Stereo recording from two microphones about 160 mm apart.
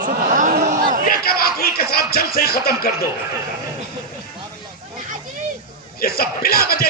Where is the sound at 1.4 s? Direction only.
70° left (ahead or behind).